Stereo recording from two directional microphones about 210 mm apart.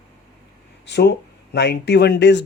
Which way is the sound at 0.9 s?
55° left (ahead or behind).